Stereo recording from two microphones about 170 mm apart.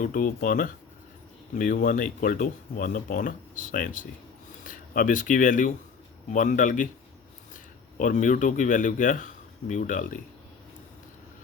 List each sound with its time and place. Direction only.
0.0 s speech: 55° left (ahead or behind)